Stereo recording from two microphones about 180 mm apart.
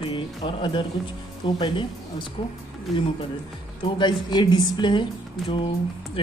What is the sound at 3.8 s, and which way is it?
Speech, 25° left (ahead or behind).